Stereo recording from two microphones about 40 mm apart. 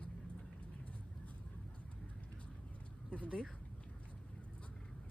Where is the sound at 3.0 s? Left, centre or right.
Left.